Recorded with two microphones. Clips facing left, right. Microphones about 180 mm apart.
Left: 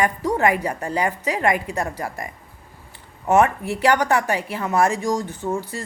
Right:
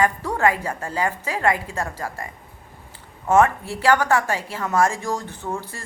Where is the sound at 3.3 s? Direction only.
20° left (ahead or behind).